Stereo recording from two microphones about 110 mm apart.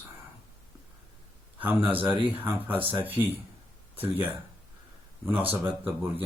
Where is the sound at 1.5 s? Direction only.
15° right (ahead or behind).